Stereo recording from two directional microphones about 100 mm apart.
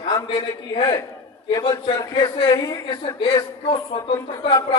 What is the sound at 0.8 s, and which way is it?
A man's voice, 40° left (ahead or behind).